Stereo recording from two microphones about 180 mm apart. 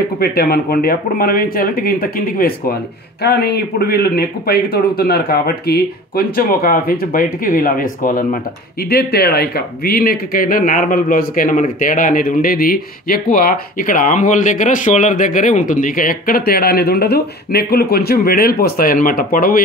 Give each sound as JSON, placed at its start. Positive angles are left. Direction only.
{"t": 0.2, "sound": "speech", "side_deg": 55}